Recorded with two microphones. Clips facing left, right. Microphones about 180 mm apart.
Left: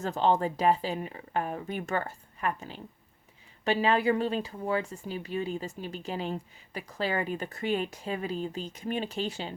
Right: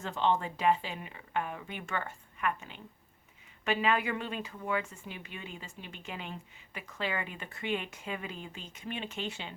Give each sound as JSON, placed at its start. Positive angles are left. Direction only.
{"t": 0.0, "sound": "speech", "side_deg": 40}